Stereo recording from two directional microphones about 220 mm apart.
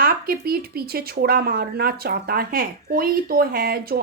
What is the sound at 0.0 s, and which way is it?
A woman's voice, 45° right (ahead or behind).